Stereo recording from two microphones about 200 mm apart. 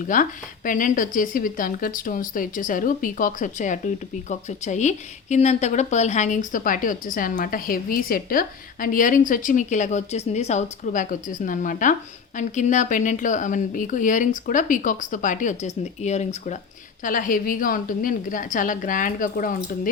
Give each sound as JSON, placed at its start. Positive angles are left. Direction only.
{"t": 0.0, "sound": "a woman's voice", "side_deg": 40}